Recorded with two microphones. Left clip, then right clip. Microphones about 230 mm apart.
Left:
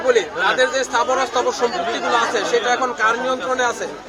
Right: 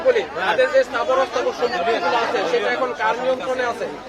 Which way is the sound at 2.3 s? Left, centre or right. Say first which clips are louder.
Left 2 dB; left.